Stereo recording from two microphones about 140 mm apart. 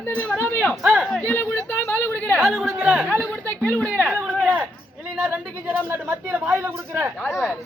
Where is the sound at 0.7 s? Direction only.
5° right (ahead or behind).